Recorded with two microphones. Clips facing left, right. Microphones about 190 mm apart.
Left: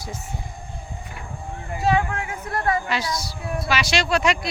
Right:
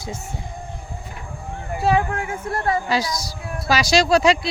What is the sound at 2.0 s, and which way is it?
A woman's voice, 30° right (ahead or behind).